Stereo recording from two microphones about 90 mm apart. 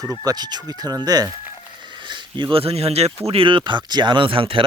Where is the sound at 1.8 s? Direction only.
60° right (ahead or behind).